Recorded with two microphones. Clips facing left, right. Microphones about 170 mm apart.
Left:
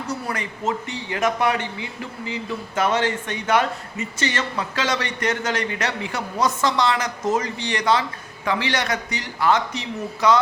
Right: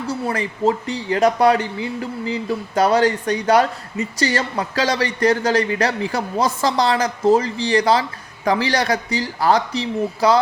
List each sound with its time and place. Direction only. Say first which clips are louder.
0.1 s speech: right 6 dB; 30° right (ahead or behind)